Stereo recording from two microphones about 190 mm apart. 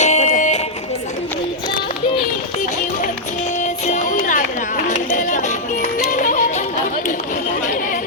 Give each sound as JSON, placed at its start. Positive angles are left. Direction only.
{"t": 0.0, "sound": "music", "side_deg": 35}
{"t": 3.6, "sound": "music", "side_deg": 40}